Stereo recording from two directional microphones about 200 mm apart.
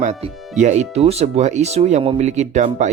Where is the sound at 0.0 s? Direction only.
35° right (ahead or behind).